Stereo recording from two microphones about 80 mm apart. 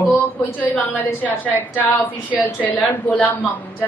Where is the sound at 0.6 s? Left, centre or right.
Left.